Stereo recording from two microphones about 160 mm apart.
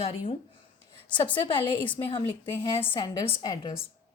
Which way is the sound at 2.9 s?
30° left (ahead or behind).